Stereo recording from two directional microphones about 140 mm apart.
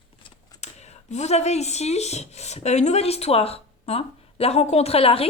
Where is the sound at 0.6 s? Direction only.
55° left (ahead or behind).